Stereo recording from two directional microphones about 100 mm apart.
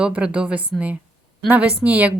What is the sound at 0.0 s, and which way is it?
Speech, 10° right (ahead or behind).